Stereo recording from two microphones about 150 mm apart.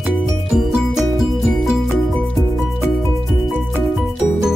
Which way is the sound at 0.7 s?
Centre (ahead or behind).